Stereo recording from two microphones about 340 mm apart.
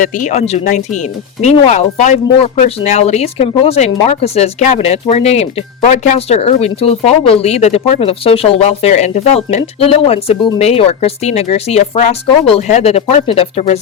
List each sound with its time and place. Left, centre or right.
0.0 s speech: left